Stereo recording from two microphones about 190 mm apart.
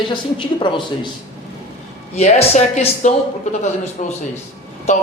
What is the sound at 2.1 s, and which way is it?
Speech, 35° left (ahead or behind).